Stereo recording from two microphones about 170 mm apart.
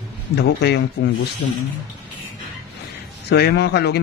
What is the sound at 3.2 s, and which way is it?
Speech, 75° left (ahead or behind).